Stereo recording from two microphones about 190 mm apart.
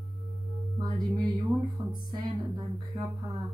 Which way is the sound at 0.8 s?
20° right (ahead or behind).